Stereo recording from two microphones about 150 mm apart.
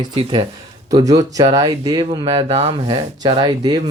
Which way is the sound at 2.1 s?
40° right (ahead or behind).